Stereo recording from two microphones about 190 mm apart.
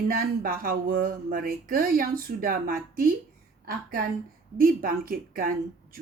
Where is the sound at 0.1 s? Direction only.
50° right (ahead or behind).